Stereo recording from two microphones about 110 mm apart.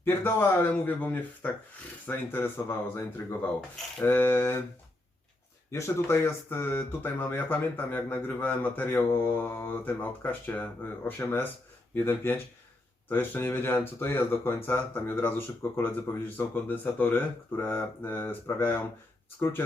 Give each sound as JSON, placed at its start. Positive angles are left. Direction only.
{"t": 0.0, "sound": "speech", "side_deg": 20}
{"t": 5.7, "sound": "speech", "side_deg": 25}